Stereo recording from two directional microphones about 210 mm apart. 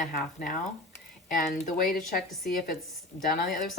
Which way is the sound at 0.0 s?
40° left (ahead or behind).